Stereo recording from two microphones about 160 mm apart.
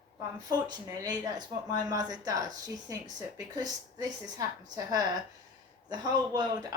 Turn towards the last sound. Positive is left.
turn(degrees=-25)  # may be behind; listen again after turning